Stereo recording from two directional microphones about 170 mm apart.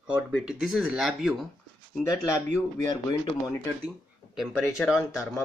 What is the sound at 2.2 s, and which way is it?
Speech, 15° left (ahead or behind).